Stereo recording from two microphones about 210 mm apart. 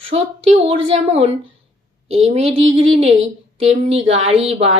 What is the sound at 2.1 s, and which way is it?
Speech, 30° right (ahead or behind).